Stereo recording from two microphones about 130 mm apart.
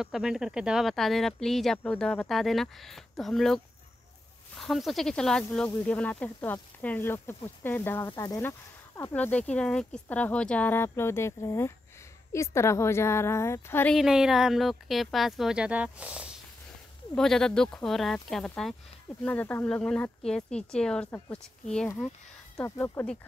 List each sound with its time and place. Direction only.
0.0 s speech: 5° right (ahead or behind); by 8.1 s 15° left (ahead or behind)
8.1 s a woman's voice: 25° left (ahead or behind)
8.4 s a woman's voice: 15° left (ahead or behind)
13.9 s speech: 5° right (ahead or behind)
17.1 s speech: 5° left (ahead or behind)
19.2 s speech: 15° left (ahead or behind)